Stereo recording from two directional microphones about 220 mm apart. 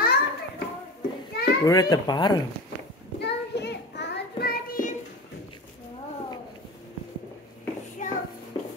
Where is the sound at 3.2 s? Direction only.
50° left (ahead or behind).